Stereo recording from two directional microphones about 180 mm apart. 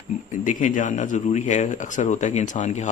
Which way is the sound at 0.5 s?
45° left (ahead or behind).